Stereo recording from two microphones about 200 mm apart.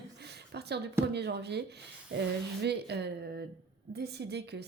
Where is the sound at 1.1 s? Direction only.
55° right (ahead or behind).